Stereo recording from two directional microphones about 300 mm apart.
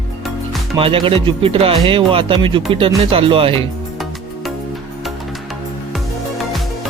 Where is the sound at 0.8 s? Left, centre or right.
Centre.